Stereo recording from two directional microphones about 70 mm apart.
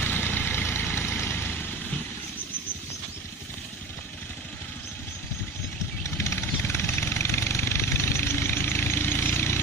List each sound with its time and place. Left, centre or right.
0.0 s vehicle: left
6.0 s vehicle: left